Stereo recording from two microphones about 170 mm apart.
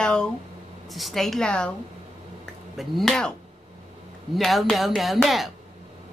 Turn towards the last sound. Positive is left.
turn(degrees=0)  # may be behind; listen again after turning